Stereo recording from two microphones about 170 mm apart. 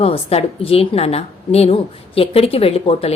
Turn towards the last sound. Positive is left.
turn(degrees=35)  # may be behind; listen again after turning